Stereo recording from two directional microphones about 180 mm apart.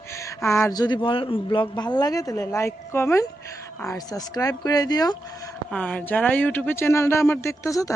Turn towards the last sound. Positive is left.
turn(degrees=15)  # may be behind; listen again after turning